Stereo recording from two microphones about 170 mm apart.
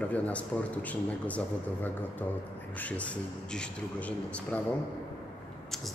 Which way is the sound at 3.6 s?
10° left (ahead or behind).